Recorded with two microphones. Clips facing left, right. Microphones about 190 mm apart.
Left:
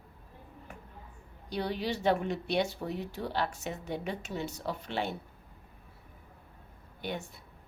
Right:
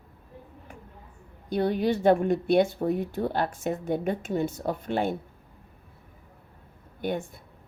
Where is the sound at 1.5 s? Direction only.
50° right (ahead or behind).